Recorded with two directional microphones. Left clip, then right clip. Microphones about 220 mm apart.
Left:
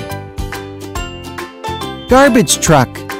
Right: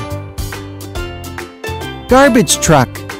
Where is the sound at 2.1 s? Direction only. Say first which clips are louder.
Even; centre (ahead or behind).